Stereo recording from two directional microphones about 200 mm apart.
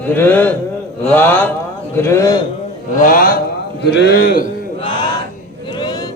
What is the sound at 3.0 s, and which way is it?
Speech, 45° left (ahead or behind).